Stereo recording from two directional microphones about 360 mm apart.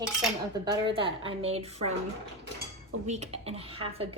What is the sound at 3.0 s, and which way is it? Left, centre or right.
Cutlery, centre.